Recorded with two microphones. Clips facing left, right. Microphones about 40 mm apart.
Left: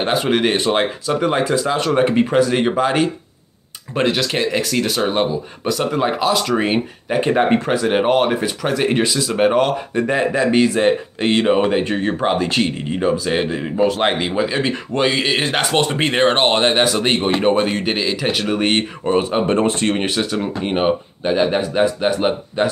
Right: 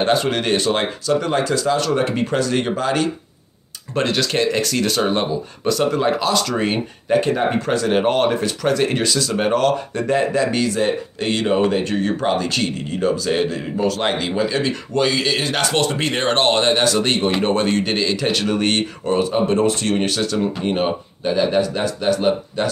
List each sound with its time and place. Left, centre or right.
0.0 s speech: centre
7.3 s speech: left
7.6 s speech: centre
19.1 s speech: left